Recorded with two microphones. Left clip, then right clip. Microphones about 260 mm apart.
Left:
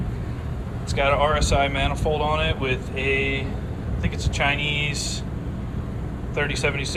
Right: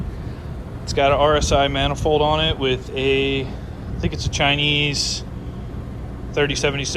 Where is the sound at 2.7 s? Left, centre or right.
Centre.